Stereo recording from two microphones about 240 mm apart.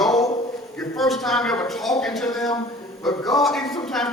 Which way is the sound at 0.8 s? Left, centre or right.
Centre.